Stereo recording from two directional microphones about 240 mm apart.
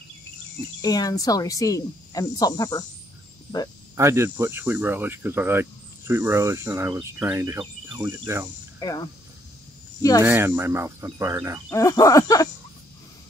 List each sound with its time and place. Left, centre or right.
0.8 s speech: centre
3.9 s speech: centre
8.7 s speech: centre
10.2 s speech: centre
11.7 s speech: centre